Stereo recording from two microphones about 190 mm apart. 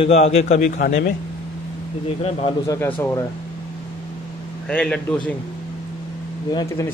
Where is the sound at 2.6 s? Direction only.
20° left (ahead or behind).